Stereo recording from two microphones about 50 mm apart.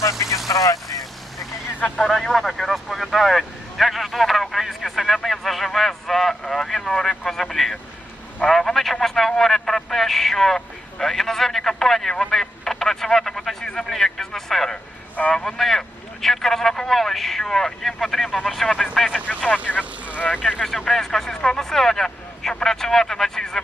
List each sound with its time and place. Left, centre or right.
0.0 s speech: left
2.0 s speech: centre
19.8 s vehicle: right
20.3 s speech: centre
20.6 s speech: centre